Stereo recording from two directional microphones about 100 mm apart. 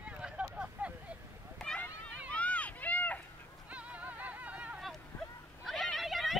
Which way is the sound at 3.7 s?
15° right (ahead or behind).